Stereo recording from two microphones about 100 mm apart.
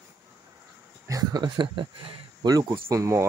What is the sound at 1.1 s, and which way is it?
Speech, 40° right (ahead or behind).